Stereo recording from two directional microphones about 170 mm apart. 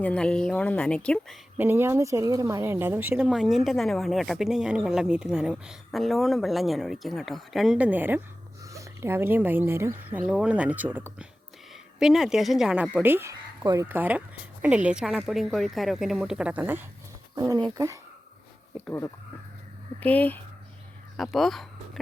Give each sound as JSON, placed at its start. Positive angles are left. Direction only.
{"t": 0.0, "sound": "speech", "side_deg": 5}
{"t": 1.5, "sound": "speech", "side_deg": -15}
{"t": 17.3, "sound": "speech", "side_deg": -20}
{"t": 18.9, "sound": "speech", "side_deg": 15}